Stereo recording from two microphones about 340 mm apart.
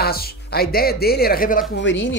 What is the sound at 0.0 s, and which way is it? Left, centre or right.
Speech, left.